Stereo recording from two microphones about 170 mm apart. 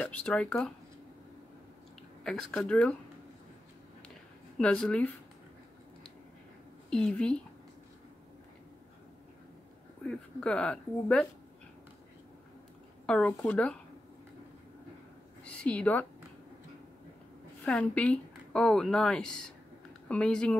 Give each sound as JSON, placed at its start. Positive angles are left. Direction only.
{"t": 0.0, "sound": "speech", "side_deg": 5}
{"t": 2.2, "sound": "speech", "side_deg": 5}
{"t": 4.6, "sound": "speech", "side_deg": 5}
{"t": 6.9, "sound": "speech", "side_deg": 5}
{"t": 10.0, "sound": "speech", "side_deg": 5}
{"t": 13.0, "sound": "speech", "side_deg": 5}
{"t": 15.4, "sound": "a woman's voice", "side_deg": 10}
{"t": 17.6, "sound": "speech", "side_deg": 5}